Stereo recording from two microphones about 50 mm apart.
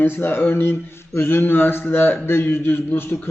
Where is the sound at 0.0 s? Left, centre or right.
Left.